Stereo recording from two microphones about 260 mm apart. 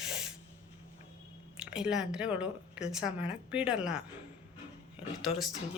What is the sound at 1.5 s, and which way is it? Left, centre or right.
Speech, centre.